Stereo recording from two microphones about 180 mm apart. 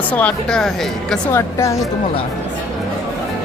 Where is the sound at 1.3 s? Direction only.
15° left (ahead or behind).